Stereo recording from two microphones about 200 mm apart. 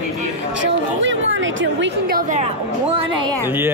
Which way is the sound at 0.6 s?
65° right (ahead or behind).